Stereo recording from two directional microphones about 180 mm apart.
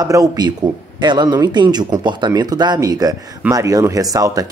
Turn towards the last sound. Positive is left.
turn(degrees=-20)  # may be behind; listen again after turning